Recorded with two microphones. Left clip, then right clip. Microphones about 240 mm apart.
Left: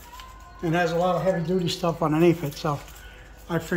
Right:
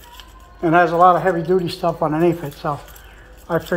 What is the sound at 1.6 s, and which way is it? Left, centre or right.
Speech, centre.